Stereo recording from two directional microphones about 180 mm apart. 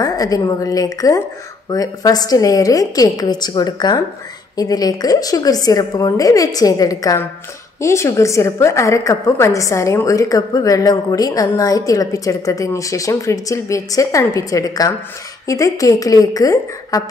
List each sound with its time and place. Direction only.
0.0 s a woman's voice: 20° left (ahead or behind)